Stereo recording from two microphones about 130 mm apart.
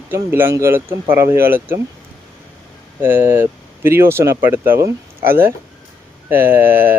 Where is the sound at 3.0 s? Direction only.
15° right (ahead or behind).